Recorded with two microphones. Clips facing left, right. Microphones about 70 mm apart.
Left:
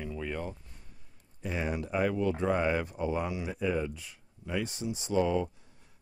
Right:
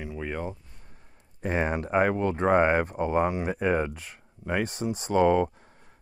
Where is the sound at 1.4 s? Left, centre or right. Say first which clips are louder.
Right 6 dB; right.